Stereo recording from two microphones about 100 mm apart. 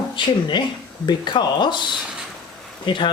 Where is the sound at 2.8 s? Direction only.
50° left (ahead or behind).